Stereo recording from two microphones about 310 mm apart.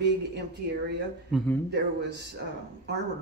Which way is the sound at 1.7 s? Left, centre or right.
Right.